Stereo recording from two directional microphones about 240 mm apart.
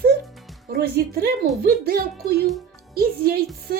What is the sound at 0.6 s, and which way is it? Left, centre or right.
Speech, right.